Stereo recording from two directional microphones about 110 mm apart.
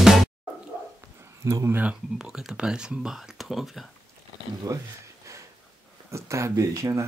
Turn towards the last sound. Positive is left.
turn(degrees=-30)  # may be behind; listen again after turning